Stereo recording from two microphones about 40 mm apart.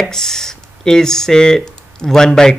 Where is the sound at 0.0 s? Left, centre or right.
Centre.